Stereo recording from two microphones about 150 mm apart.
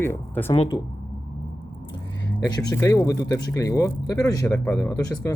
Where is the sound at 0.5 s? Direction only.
40° left (ahead or behind).